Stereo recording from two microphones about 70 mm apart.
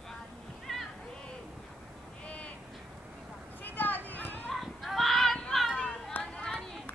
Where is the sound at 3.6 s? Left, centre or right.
Left.